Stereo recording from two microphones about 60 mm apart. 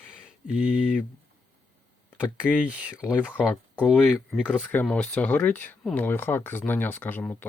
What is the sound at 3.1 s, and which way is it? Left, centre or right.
Speech, left.